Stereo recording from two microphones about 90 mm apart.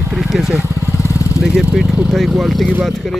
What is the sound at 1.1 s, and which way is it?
Vehicle, 35° left (ahead or behind).